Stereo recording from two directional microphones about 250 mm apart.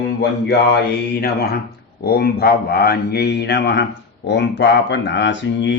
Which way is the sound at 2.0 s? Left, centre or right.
Left.